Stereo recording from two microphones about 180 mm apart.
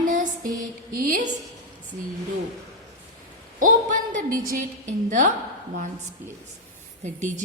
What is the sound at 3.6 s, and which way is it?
Speech, 50° right (ahead or behind).